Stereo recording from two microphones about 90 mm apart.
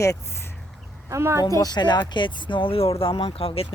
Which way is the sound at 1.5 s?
40° left (ahead or behind).